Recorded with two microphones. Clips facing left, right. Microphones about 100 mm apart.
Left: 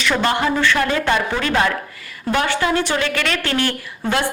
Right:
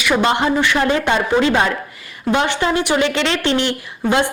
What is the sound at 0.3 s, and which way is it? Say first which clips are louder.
A woman's voice: right 2 dB; 20° right (ahead or behind).